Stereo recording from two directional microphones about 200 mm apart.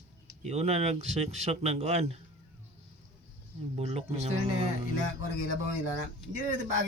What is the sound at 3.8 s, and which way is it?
Speech, 30° right (ahead or behind).